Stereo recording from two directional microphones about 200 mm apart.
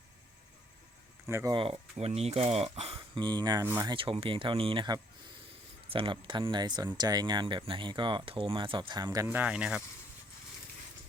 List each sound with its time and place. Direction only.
1.3 s speech: 15° right (ahead or behind)
2.0 s speech: 30° right (ahead or behind); by 3.9 s 15° right (ahead or behind)
3.9 s speech: 25° right (ahead or behind); by 9.8 s 5° right (ahead or behind)